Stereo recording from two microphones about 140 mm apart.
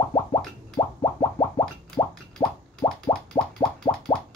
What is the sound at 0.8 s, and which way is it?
Plop, 40° left (ahead or behind).